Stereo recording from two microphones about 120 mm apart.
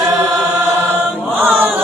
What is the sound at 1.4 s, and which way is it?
Chant, 15° right (ahead or behind).